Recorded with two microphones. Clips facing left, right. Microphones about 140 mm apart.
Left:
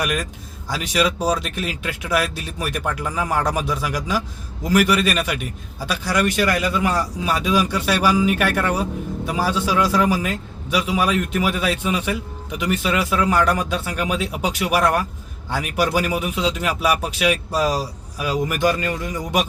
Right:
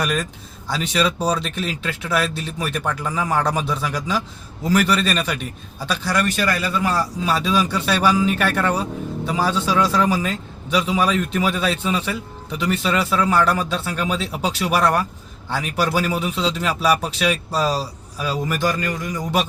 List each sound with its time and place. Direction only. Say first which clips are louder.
0.0 s a man's voice: right 1 dB; 10° left (ahead or behind)
6.3 s a man's voice: left 2 dB; 20° left (ahead or behind)